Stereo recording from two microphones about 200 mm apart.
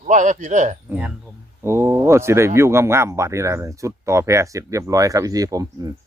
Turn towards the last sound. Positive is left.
turn(degrees=-20)  # may be behind; listen again after turning